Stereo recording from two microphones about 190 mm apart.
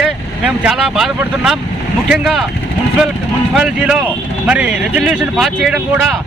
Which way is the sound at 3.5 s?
5° right (ahead or behind).